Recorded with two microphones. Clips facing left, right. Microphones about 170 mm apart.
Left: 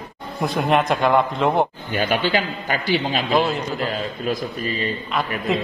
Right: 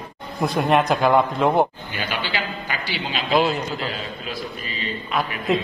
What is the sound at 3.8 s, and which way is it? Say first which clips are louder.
A man's voice: left 5 dB; 45° left (ahead or behind).